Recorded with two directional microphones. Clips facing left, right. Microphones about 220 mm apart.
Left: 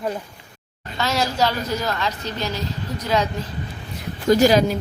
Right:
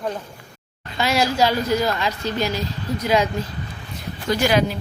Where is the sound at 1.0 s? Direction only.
10° right (ahead or behind).